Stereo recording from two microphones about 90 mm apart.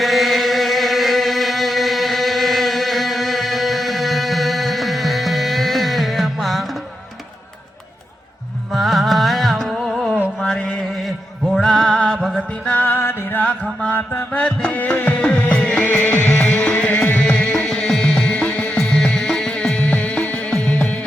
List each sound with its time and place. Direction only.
0.0 s chant: centre (ahead or behind)
8.7 s music: centre (ahead or behind)
10.4 s mantra: 10° left (ahead or behind)
11.5 s music: 5° left (ahead or behind)
12.4 s music: 15° left (ahead or behind)